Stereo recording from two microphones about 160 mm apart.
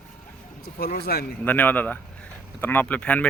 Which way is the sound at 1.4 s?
10° left (ahead or behind).